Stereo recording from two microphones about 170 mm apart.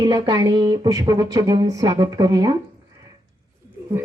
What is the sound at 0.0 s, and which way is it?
Speech, 20° right (ahead or behind).